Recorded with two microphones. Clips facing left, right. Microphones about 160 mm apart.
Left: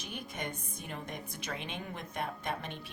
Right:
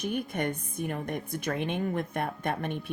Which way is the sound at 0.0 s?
55° right (ahead or behind).